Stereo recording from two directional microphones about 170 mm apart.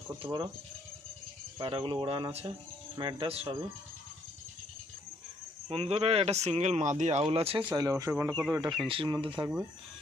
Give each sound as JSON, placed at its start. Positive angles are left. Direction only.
{"t": 0.2, "sound": "speech", "side_deg": -30}
{"t": 1.5, "sound": "speech", "side_deg": -30}
{"t": 5.6, "sound": "speech", "side_deg": -35}
{"t": 7.7, "sound": "speech", "side_deg": -20}